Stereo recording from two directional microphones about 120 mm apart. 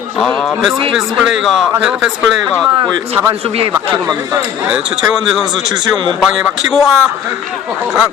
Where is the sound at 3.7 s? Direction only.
30° right (ahead or behind).